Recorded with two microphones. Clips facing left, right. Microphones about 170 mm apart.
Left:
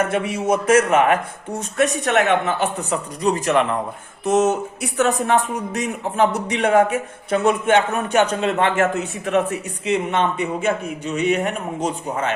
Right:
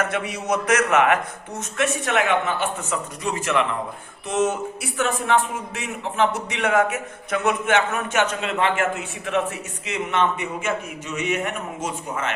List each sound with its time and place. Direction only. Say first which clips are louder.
0.0 s a man's voice: left 5 dB; 30° left (ahead or behind)